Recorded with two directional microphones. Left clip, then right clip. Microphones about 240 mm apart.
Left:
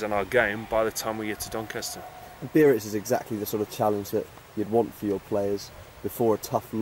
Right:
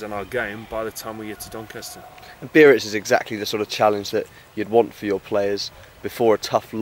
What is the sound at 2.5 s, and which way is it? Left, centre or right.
Speech, right.